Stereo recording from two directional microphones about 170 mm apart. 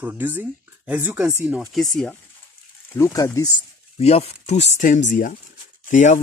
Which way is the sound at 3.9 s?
35° left (ahead or behind).